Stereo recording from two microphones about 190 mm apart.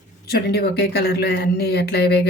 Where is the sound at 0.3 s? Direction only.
55° left (ahead or behind).